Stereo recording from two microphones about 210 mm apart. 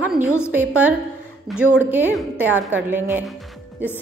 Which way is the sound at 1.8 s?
10° right (ahead or behind).